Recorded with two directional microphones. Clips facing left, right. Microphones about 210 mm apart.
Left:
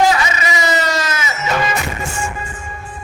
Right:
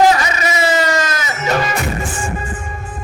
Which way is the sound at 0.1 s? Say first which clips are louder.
Right 2 dB; 40° right (ahead or behind).